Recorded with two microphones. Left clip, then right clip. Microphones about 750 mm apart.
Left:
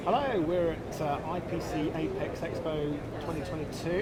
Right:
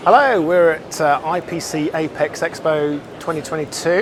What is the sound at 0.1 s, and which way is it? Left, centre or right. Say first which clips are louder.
Speech: right 16 dB; right.